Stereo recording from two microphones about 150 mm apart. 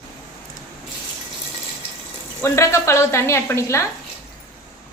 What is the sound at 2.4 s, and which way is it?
Speech, 20° left (ahead or behind).